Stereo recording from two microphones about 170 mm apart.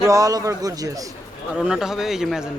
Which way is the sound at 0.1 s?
20° right (ahead or behind).